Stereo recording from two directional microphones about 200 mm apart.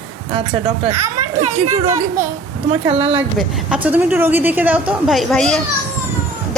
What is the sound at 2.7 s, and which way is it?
Speech, 30° right (ahead or behind).